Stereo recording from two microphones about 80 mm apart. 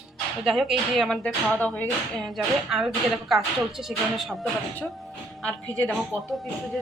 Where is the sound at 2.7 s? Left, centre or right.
Centre.